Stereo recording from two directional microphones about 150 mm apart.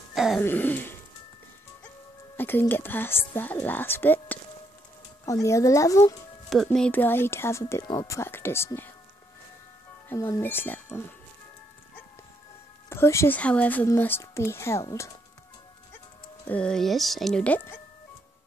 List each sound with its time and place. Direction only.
0.1 s music: centre (ahead or behind)
0.4 s speech: 10° left (ahead or behind)
2.3 s music: 15° left (ahead or behind)
2.7 s speech: 15° left (ahead or behind)
6.5 s speech: centre (ahead or behind)
10.0 s speech: 20° left (ahead or behind)
12.9 s speech: 15° left (ahead or behind)
16.4 s speech: 5° left (ahead or behind)